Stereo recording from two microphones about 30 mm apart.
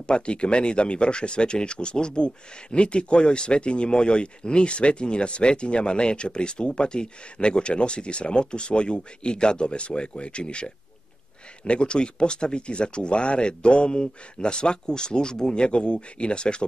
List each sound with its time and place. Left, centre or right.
0.0 s speech: left